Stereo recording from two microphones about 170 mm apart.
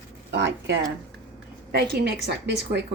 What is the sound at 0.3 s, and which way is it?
Speech, 85° right.